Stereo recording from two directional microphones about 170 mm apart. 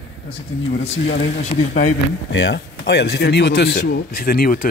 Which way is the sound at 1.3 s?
45° left (ahead or behind).